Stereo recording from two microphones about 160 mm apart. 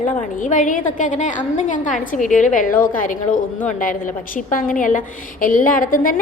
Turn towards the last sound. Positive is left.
turn(degrees=60)  # may be behind; listen again after turning